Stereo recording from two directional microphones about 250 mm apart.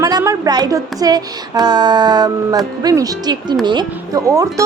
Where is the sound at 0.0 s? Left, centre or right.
Centre.